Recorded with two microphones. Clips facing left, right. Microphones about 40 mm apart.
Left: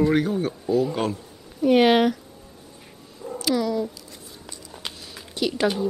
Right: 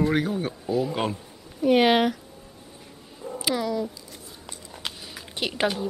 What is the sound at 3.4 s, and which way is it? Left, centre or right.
Cat, centre.